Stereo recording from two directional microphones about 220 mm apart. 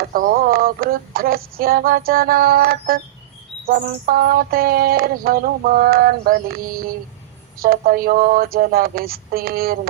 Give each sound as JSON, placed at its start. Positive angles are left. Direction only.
{"t": 0.0, "sound": "speech", "side_deg": -40}
{"t": 3.7, "sound": "a sound", "side_deg": -40}
{"t": 7.6, "sound": "speech", "side_deg": -40}